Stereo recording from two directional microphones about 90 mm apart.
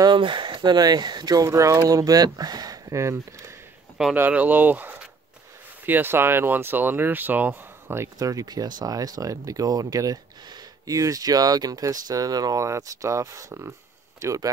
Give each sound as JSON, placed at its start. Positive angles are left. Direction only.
{"t": 0.0, "sound": "speech", "side_deg": -60}
{"t": 4.2, "sound": "speech", "side_deg": -20}
{"t": 8.2, "sound": "speech", "side_deg": -40}